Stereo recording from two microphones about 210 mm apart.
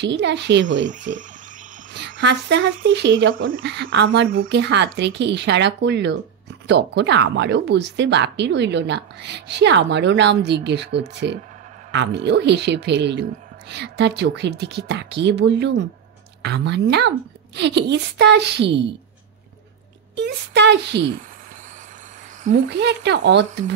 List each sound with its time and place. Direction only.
0.0 s speech: 55° right (ahead or behind)
2.0 s a woman's voice: 55° right (ahead or behind)
20.2 s speech: 55° right (ahead or behind)
22.5 s speech: 55° right (ahead or behind)